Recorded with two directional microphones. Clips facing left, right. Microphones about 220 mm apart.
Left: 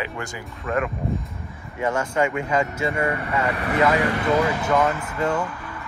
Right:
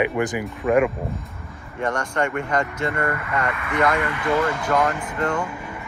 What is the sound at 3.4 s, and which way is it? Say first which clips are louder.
Speech: left 3 dB; 35° left (ahead or behind).